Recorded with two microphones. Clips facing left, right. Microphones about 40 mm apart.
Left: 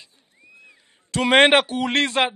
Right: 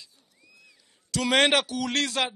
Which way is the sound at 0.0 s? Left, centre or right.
Left.